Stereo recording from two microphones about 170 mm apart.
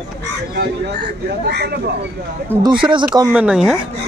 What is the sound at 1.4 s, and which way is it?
Speech, 70° right (ahead or behind).